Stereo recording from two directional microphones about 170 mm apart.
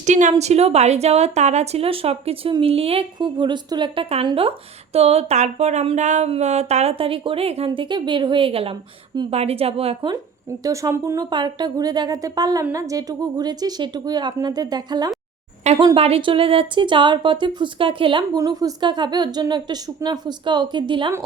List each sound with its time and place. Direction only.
0.0 s a woman's voice: 45° right (ahead or behind)
10.6 s speech: 20° right (ahead or behind)
15.6 s speech: 35° right (ahead or behind)